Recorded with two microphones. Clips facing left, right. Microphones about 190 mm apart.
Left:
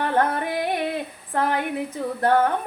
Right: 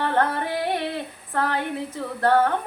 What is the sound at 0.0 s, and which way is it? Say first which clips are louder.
Music: left 1 dB; 15° left (ahead or behind).